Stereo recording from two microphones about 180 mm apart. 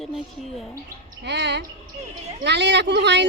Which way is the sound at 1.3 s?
70° right (ahead or behind).